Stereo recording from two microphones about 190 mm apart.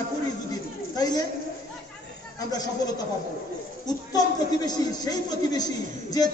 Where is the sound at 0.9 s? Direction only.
20° left (ahead or behind).